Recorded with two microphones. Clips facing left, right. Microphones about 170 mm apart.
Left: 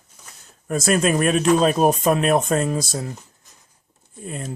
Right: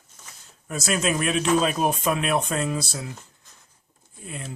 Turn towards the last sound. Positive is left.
turn(degrees=45)  # may be behind; listen again after turning